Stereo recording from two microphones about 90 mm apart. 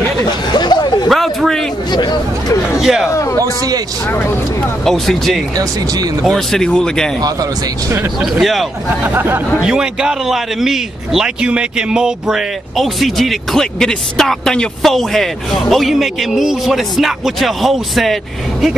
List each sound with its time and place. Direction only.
0.5 s chatter: 50° left (ahead or behind)
1.0 s a sound: centre (ahead or behind)
1.9 s chatter: 50° left (ahead or behind)
2.8 s a man's voice: 5° right (ahead or behind)
3.1 s a sound: 35° left (ahead or behind)
4.8 s a man's voice: 5° left (ahead or behind)
8.2 s a man's voice: centre (ahead or behind)
9.0 s speech: 25° right (ahead or behind)
9.6 s a man's voice: 10° right (ahead or behind)